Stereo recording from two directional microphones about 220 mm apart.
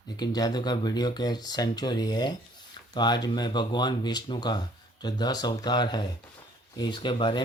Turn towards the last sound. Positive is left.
turn(degrees=20)  # may be behind; listen again after turning